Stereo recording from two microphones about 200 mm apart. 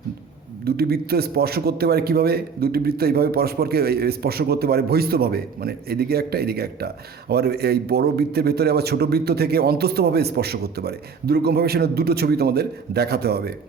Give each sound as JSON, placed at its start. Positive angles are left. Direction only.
{"t": 0.6, "sound": "a man's voice", "side_deg": -50}